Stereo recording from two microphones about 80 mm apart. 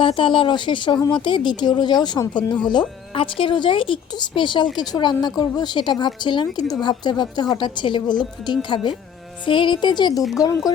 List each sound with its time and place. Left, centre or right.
0.0 s speech: left
3.2 s speech: left
9.5 s speech: left
10.3 s speech: left